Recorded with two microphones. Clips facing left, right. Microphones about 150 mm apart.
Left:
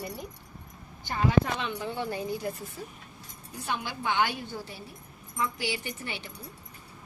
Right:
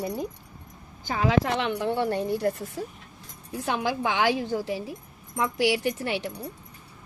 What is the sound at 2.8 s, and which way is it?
A woman's voice, 80° right.